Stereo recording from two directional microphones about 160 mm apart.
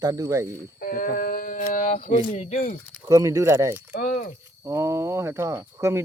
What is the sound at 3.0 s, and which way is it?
Speech, 20° right (ahead or behind).